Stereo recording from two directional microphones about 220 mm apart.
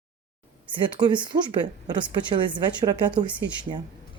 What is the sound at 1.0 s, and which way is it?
Speech, 20° right (ahead or behind).